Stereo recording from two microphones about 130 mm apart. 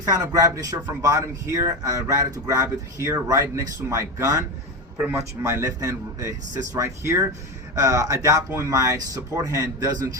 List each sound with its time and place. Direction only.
0.0 s speech: 25° right (ahead or behind)